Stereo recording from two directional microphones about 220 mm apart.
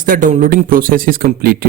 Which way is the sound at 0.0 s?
40° right (ahead or behind).